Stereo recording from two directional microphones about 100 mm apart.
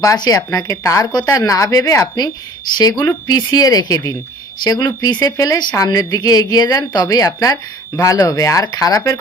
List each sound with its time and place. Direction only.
0.0 s a woman's voice: 35° left (ahead or behind)